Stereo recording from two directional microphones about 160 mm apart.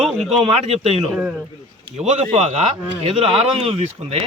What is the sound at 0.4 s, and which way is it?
Speech, 40° right (ahead or behind).